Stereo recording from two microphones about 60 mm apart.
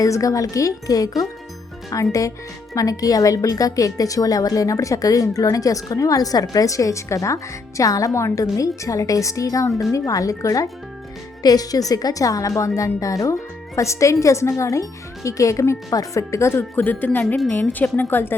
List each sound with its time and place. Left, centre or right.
0.0 s a woman's voice: left
1.9 s a woman's voice: left
2.7 s a woman's voice: left
11.4 s a woman's voice: left
15.9 s speech: left
16.8 s a woman's voice: left